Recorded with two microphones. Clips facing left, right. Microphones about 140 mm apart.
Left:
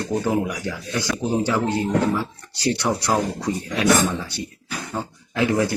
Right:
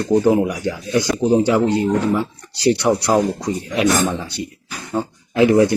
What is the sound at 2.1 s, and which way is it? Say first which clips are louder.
Speech: right 5 dB; 10° right (ahead or behind).